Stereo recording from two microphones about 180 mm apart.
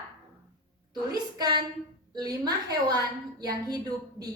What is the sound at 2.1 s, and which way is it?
A woman's voice, 20° right (ahead or behind).